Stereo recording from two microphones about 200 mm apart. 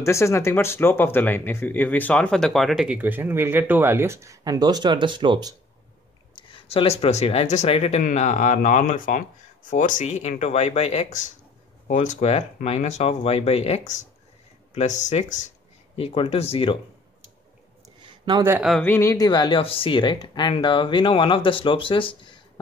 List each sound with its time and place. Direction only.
0.0 s speech: 15° left (ahead or behind); by 5.6 s 20° right (ahead or behind)
6.3 s speech: 25° left (ahead or behind)
18.4 s speech: 10° right (ahead or behind)
18.7 s speech: 10° left (ahead or behind)